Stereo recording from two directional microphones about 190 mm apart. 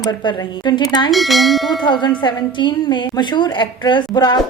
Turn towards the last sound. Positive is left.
turn(degrees=20)  # may be behind; listen again after turning